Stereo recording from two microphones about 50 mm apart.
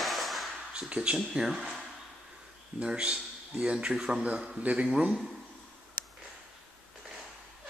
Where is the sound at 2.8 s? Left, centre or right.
Centre.